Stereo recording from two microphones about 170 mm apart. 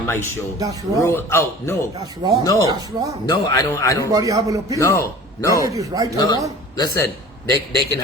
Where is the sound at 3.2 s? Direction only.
20° left (ahead or behind).